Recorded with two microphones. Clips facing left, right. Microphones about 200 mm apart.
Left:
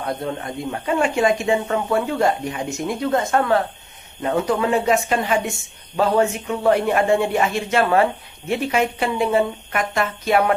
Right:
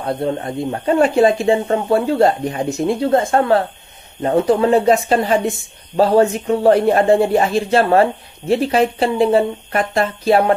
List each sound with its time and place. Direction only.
0.0 s speech: 30° right (ahead or behind)